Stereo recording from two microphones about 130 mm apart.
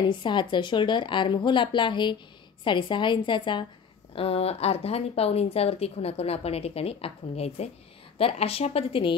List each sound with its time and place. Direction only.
0.1 s a woman's voice: 35° left (ahead or behind)
4.1 s speech: 50° left (ahead or behind)